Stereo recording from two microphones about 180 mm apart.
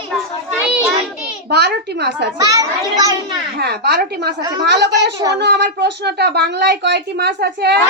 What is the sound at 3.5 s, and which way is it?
A woman's voice, 65° right (ahead or behind).